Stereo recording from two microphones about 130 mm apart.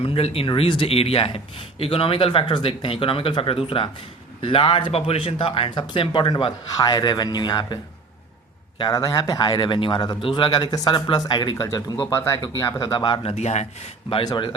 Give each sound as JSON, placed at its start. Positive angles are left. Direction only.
{"t": 0.0, "sound": "a man's voice", "side_deg": 45}
{"t": 8.8, "sound": "a man's voice", "side_deg": 30}
{"t": 12.8, "sound": "a man's voice", "side_deg": 35}
{"t": 13.3, "sound": "speech", "side_deg": 60}
{"t": 14.1, "sound": "a man's voice", "side_deg": 40}